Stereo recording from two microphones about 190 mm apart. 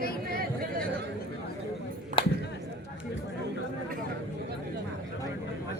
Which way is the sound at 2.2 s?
25° left (ahead or behind).